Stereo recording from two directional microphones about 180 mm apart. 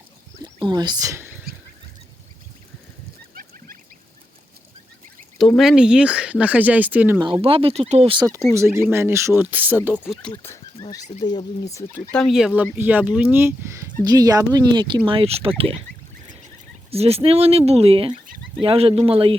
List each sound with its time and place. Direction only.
0.4 s speech: 25° right (ahead or behind)
5.4 s speech: centre (ahead or behind)
7.2 s speech: 25° right (ahead or behind)
8.5 s speech: 15° right (ahead or behind)
10.3 s a sound: 15° left (ahead or behind)
11.2 s speech: 25° left (ahead or behind)
12.1 s speech: centre (ahead or behind); by 15.8 s 30° right (ahead or behind)
16.9 s speech: 35° right (ahead or behind)